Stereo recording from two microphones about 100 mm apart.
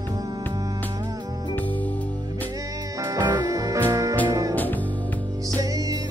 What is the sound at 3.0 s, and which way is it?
Music, 40° right (ahead or behind).